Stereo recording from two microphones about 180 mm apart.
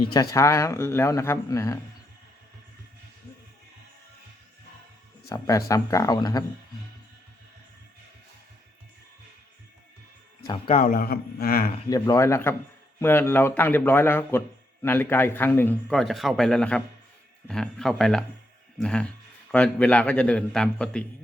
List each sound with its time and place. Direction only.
0.0 s a man's voice: 20° left (ahead or behind)
5.3 s speech: 20° left (ahead or behind)
10.4 s speech: 30° left (ahead or behind)
10.8 s speech: 55° left (ahead or behind)
11.9 s a man's voice: 20° left (ahead or behind)